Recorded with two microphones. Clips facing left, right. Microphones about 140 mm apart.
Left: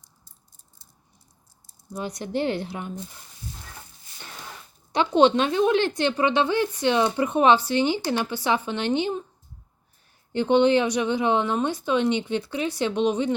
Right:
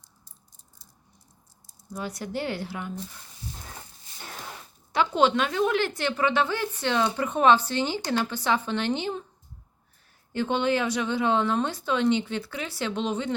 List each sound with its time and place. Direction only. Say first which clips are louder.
1.9 s speech: left 3 dB; 20° left (ahead or behind)
4.9 s a woman's voice: left 4 dB; 20° left (ahead or behind)
10.3 s a woman's voice: left 6 dB; 20° left (ahead or behind)